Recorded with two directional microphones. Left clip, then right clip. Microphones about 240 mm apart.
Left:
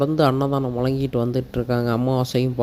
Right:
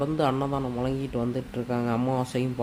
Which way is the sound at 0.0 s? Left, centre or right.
Left.